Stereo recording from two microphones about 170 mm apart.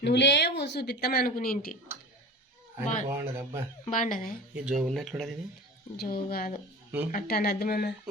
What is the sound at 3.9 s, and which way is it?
Speech, 50° left (ahead or behind).